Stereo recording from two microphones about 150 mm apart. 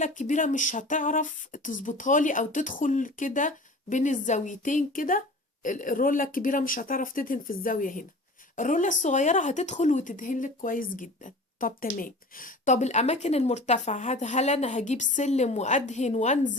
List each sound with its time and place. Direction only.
0.0 s speech: 55° left (ahead or behind)